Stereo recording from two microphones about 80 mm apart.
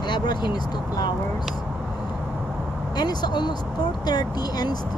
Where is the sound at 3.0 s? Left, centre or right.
Left.